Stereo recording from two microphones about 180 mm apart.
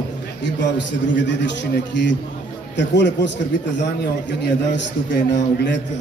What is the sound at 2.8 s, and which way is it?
Speech, 75° left (ahead or behind).